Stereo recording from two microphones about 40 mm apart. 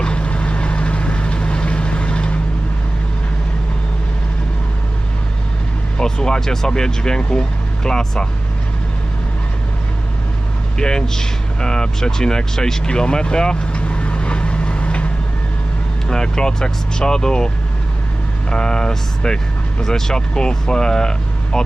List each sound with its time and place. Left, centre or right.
0.0 s vehicle: left
6.0 s speech: centre
10.8 s speech: centre; by 15.1 s left
16.0 s speech: centre
18.5 s speech: centre